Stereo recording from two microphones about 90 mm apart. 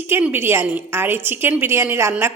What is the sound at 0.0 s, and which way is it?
A woman's voice, 25° right (ahead or behind).